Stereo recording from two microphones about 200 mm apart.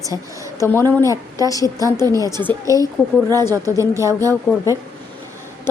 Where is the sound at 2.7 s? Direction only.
15° right (ahead or behind).